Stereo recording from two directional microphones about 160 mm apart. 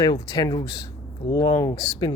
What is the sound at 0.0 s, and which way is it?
Speech, 25° left (ahead or behind).